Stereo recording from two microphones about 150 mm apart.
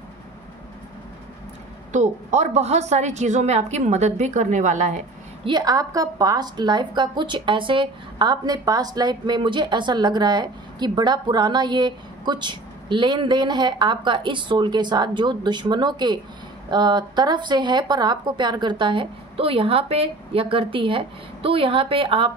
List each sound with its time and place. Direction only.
1.9 s a woman's voice: 50° right (ahead or behind)
5.4 s a woman's voice: 30° right (ahead or behind)